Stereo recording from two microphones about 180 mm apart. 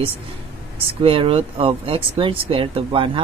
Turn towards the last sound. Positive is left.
turn(degrees=-30)  # may be behind; listen again after turning